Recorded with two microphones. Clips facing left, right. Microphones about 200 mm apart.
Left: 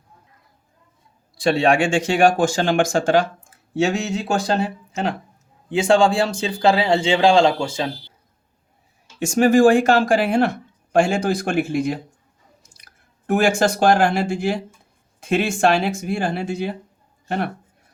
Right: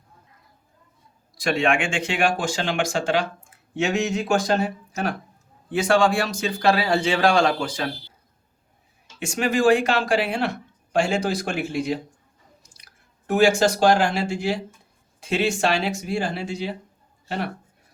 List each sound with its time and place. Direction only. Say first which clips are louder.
1.4 s a man's voice: left 5 dB; 35° left (ahead or behind)
3.8 s speech: left 2 dB; 35° left (ahead or behind)
9.2 s a man's voice: left 6 dB; 45° left (ahead or behind)